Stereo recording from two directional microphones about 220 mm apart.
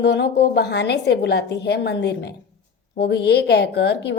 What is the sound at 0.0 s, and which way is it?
A woman's voice, 50° left (ahead or behind).